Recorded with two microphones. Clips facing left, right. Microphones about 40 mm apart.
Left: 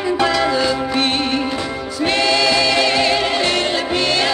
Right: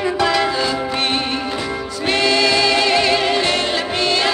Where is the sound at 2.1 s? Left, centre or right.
Right.